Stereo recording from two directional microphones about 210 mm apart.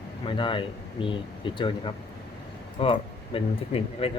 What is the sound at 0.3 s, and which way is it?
Speech, 25° left (ahead or behind).